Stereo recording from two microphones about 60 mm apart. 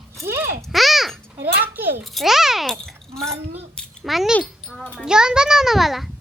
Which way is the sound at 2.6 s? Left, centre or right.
Centre.